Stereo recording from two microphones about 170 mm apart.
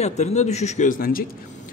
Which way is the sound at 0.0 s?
40° left (ahead or behind).